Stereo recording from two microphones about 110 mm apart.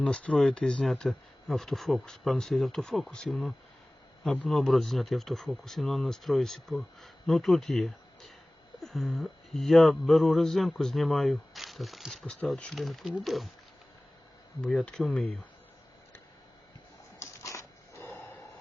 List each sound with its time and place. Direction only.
0.0 s speech: 10° left (ahead or behind)
14.6 s speech: 5° left (ahead or behind)
17.2 s a sound: 30° left (ahead or behind)